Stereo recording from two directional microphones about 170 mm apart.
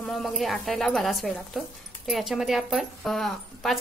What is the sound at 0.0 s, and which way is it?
Speech, centre (ahead or behind).